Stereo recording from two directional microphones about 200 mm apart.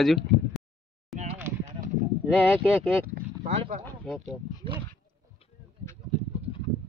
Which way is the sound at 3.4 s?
35° right (ahead or behind).